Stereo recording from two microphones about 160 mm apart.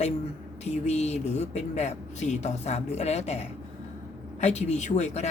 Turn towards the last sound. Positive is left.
turn(degrees=45)  # may be behind; listen again after turning